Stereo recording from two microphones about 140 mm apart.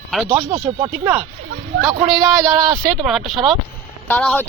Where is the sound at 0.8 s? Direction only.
15° right (ahead or behind).